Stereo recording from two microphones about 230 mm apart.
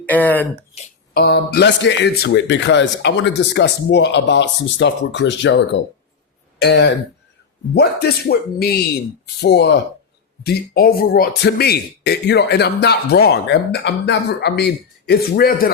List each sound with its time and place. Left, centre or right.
0.1 s speech: centre
1.1 s speech: left